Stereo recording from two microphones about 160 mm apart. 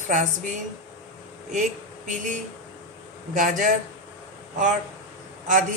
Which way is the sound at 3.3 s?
50° right (ahead or behind).